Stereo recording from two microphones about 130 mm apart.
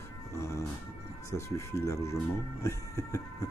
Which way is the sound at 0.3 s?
20° left (ahead or behind).